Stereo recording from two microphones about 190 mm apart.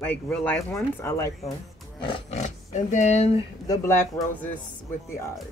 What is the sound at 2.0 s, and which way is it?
Speech, 35° left (ahead or behind).